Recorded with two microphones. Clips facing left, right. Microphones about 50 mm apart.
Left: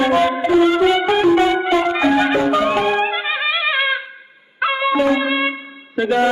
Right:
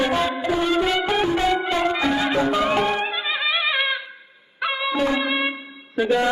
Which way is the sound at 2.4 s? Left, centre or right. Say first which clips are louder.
Left 3 dB; centre.